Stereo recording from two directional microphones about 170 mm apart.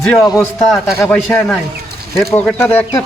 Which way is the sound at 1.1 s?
5° left (ahead or behind).